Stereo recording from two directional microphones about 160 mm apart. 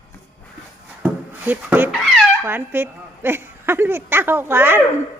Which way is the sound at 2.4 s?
15° right (ahead or behind).